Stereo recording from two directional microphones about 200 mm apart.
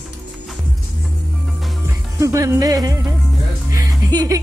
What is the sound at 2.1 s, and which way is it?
Speech, 15° right (ahead or behind).